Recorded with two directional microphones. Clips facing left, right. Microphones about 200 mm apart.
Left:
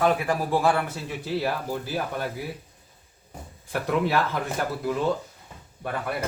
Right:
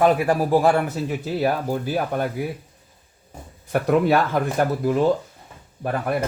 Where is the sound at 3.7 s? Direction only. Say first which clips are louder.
Right 6 dB; 50° right (ahead or behind).